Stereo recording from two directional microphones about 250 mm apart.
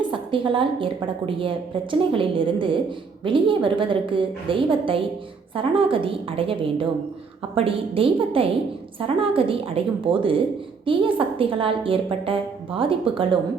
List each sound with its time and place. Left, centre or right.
0.1 s a woman's voice: right